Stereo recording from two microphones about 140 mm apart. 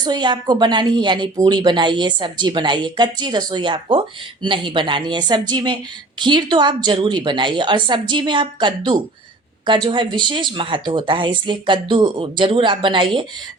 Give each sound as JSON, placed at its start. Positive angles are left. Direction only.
{"t": 0.0, "sound": "a woman's voice", "side_deg": -30}